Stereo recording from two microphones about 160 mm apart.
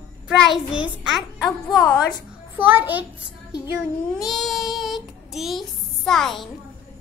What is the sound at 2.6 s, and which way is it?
Speech, 10° right (ahead or behind).